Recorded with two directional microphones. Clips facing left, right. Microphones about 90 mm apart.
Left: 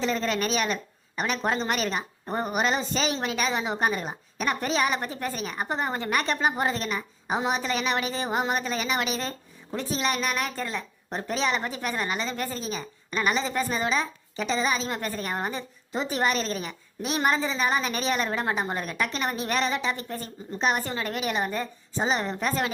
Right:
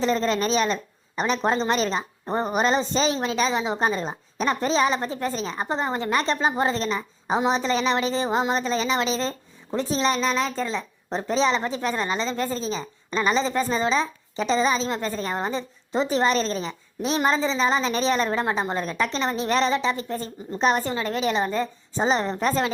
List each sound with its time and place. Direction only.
0.0 s a woman's voice: 35° right (ahead or behind)